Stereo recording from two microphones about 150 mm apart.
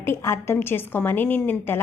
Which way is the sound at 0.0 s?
15° left (ahead or behind).